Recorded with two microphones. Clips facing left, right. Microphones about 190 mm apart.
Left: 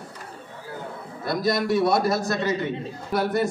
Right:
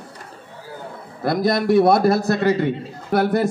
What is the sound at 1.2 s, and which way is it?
A man's voice, 60° right (ahead or behind).